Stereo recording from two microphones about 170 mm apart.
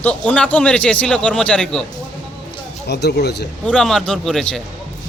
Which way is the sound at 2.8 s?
80° left.